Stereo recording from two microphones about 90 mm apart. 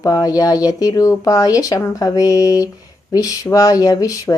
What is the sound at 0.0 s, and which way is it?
Speech, 40° left (ahead or behind).